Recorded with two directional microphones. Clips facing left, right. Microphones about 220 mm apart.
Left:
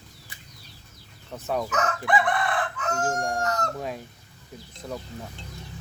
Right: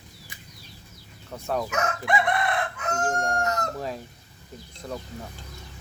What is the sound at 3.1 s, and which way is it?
Speech, 5° left (ahead or behind).